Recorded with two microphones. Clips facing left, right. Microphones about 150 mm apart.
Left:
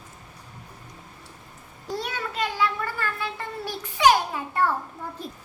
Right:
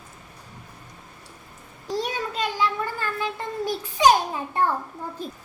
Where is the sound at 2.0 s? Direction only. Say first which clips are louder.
Right 2 dB; 20° right (ahead or behind).